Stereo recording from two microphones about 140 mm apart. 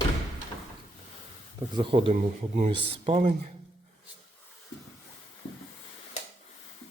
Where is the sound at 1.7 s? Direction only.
35° right (ahead or behind).